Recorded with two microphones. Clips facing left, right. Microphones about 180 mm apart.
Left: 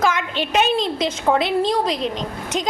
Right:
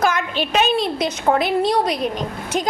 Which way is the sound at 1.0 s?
25° left (ahead or behind).